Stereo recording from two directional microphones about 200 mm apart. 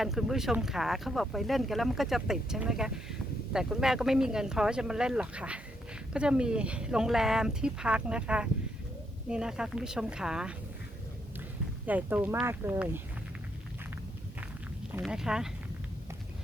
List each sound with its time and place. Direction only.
0.0 s speech: centre (ahead or behind)
11.9 s speech: 10° right (ahead or behind)
15.0 s speech: 5° right (ahead or behind)